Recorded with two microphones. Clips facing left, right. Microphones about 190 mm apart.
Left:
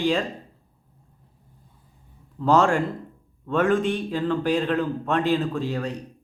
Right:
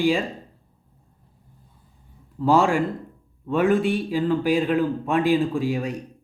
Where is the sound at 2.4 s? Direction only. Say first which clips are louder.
Right 1 dB; 5° right (ahead or behind).